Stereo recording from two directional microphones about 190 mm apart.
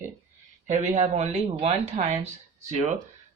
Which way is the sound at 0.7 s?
40° right (ahead or behind).